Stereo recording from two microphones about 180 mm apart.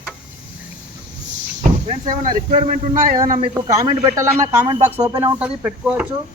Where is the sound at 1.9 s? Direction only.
40° right (ahead or behind).